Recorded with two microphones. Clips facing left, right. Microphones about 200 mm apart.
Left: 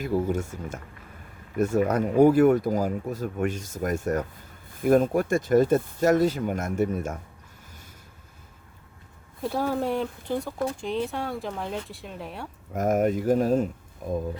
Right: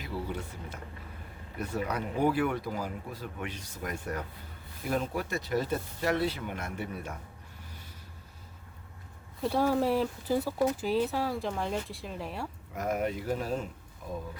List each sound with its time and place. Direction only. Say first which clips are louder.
0.0 s speech: left 10 dB; 45° left (ahead or behind)
9.4 s speech: even; centre (ahead or behind)
12.7 s speech: left 8 dB; 45° left (ahead or behind)